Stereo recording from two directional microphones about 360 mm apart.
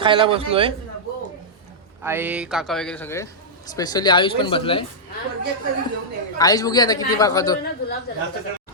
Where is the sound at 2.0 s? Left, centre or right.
Centre.